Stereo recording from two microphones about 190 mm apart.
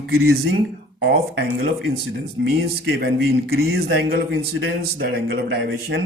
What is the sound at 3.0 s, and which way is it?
A man's voice, 55° right (ahead or behind).